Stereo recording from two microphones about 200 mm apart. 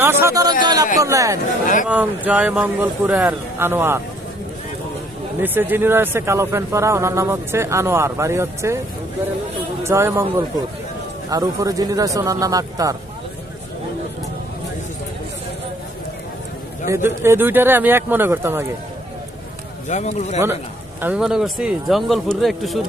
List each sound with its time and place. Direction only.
0.0 s a man's voice: 10° right (ahead or behind)
1.6 s speech: 40° left (ahead or behind)
1.9 s a man's voice: 10° right (ahead or behind)
5.4 s a man's voice: 10° right (ahead or behind)
9.8 s a man's voice: 10° right (ahead or behind)
16.9 s a man's voice: 10° right (ahead or behind)
19.9 s speech: 35° left (ahead or behind)
21.0 s speech: 5° right (ahead or behind)